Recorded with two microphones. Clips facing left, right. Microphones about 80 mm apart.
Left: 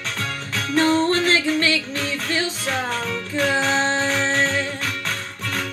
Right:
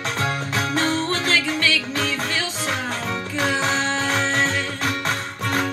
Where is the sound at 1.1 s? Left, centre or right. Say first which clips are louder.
Left 3 dB; left.